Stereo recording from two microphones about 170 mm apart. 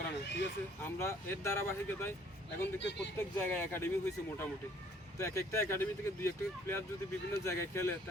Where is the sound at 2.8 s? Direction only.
90° left.